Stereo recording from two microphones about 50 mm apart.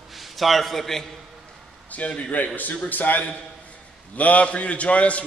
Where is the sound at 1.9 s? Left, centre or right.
Left.